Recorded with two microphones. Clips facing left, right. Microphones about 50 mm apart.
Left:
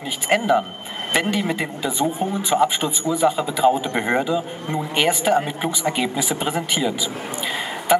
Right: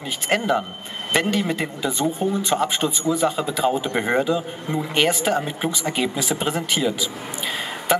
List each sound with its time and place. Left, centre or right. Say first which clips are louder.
0.3 s a man's voice: left 3 dB; centre